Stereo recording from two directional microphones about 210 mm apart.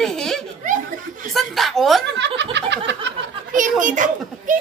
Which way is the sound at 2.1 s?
55° right (ahead or behind).